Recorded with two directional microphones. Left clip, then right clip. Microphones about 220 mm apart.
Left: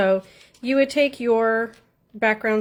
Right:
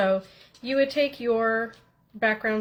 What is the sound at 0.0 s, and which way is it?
A woman's voice, 55° left (ahead or behind).